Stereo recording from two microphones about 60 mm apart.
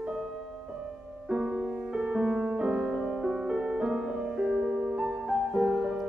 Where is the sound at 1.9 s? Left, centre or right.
Centre.